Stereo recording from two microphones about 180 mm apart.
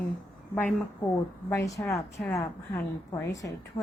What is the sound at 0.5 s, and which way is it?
A woman's voice, 10° left (ahead or behind).